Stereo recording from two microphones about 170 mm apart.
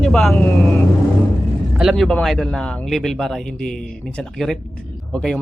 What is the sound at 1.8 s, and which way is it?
Speech, centre (ahead or behind).